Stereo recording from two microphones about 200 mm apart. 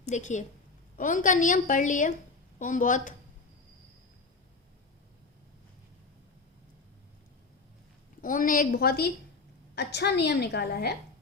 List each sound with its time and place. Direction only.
0.0 s a woman's voice: 35° left (ahead or behind)
8.2 s a woman's voice: 45° left (ahead or behind)